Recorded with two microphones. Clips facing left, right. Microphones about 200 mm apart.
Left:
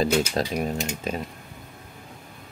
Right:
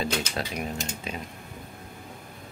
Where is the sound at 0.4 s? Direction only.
35° left (ahead or behind).